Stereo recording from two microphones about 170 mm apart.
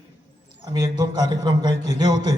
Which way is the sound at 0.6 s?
25° right (ahead or behind).